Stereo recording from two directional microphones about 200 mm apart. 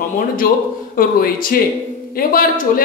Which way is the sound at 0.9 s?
45° left (ahead or behind).